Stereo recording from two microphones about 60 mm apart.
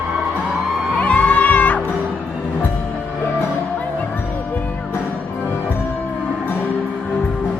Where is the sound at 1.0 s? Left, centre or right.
Left.